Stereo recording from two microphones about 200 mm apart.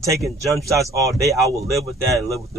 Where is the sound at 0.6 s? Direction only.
15° right (ahead or behind).